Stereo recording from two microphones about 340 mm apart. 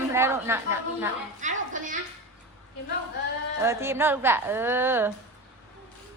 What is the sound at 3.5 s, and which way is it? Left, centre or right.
A woman's voice, centre.